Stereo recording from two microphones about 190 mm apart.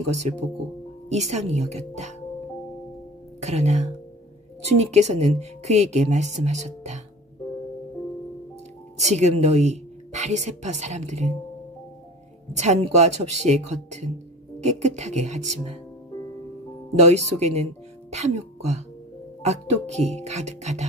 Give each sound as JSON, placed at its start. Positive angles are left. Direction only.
{"t": 0.0, "sound": "speech", "side_deg": -35}
{"t": 3.3, "sound": "speech", "side_deg": -35}
{"t": 8.9, "sound": "speech", "side_deg": -35}
{"t": 12.5, "sound": "speech", "side_deg": -35}
{"t": 16.9, "sound": "speech", "side_deg": -35}